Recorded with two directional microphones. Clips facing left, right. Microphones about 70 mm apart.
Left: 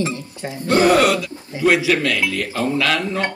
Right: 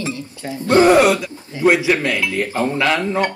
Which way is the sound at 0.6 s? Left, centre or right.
Right.